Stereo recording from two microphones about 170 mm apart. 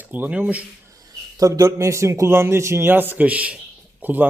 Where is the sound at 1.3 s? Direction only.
20° right (ahead or behind).